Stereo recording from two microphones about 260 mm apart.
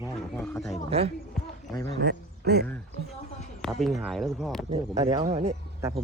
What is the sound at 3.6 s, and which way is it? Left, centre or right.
Speech, centre.